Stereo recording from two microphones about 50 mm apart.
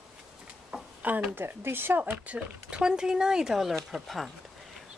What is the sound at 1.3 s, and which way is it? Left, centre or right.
Speech, right.